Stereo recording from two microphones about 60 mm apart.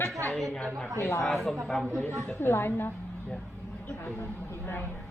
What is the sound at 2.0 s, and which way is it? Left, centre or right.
Speech, left.